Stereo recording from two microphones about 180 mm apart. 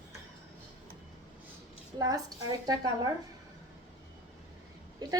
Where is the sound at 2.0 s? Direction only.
20° right (ahead or behind).